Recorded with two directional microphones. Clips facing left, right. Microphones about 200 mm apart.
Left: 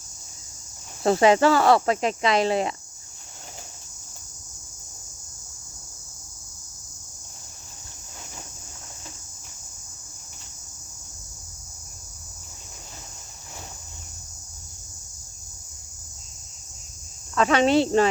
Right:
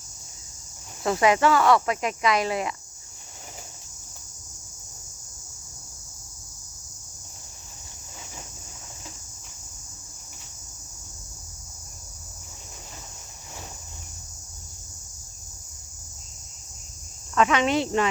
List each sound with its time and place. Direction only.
1.0 s speech: 30° left (ahead or behind)
17.3 s speech: 35° left (ahead or behind)